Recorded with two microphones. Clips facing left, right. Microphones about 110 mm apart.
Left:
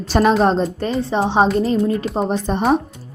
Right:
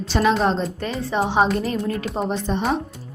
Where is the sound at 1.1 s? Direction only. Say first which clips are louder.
Left 3 dB; 30° left (ahead or behind).